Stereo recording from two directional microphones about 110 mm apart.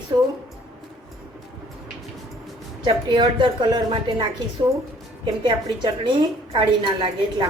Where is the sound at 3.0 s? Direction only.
45° right (ahead or behind).